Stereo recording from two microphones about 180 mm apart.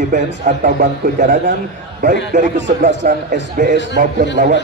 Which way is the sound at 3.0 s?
55° right (ahead or behind).